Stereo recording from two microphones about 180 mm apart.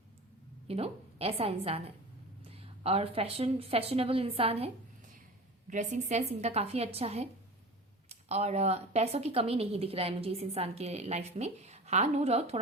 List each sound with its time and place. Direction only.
0.7 s speech: 35° right (ahead or behind)
5.6 s speech: 45° right (ahead or behind)